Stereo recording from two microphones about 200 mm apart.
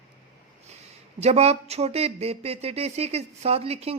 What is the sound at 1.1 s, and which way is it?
Speech, 30° right (ahead or behind).